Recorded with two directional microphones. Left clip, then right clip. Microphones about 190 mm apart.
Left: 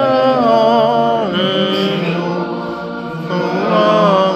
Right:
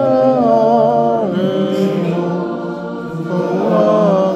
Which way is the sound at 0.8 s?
10° right (ahead or behind).